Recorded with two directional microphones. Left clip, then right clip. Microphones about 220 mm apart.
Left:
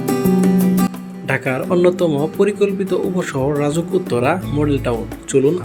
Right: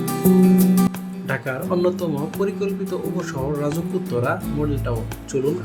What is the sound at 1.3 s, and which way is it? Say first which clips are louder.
Speech: left 6 dB; 20° left (ahead or behind).